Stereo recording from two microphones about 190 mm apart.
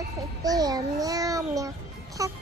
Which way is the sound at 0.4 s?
20° right (ahead or behind).